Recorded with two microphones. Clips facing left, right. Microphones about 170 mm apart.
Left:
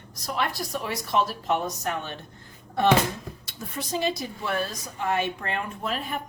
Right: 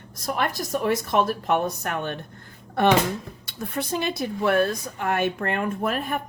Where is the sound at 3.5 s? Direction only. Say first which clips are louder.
Right 4 dB; 60° right (ahead or behind).